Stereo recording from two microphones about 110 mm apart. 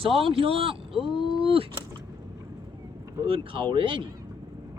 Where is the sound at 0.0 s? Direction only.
55° right (ahead or behind).